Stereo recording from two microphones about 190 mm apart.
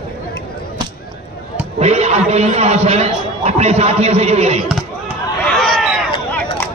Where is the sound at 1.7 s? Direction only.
35° right (ahead or behind).